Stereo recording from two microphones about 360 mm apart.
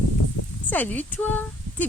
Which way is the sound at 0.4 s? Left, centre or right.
Left.